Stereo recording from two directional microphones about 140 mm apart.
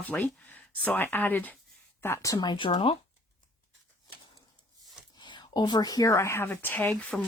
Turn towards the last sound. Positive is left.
turn(degrees=10)  # may be behind; listen again after turning